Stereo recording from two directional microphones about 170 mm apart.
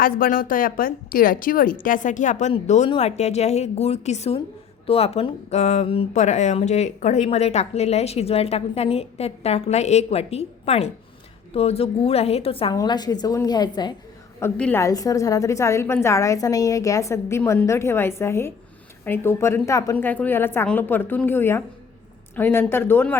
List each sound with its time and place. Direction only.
0.0 s a woman's voice: 55° left (ahead or behind); by 13.9 s 25° left (ahead or behind)
14.3 s a woman's voice: 15° left (ahead or behind)